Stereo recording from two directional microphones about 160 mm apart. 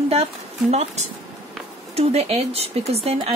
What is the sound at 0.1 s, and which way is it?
A woman's voice, 40° right (ahead or behind).